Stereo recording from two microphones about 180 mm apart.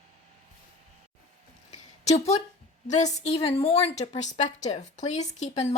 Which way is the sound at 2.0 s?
35° left (ahead or behind).